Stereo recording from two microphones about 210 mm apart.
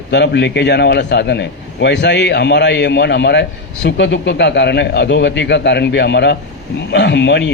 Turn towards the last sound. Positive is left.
turn(degrees=55)  # may be behind; listen again after turning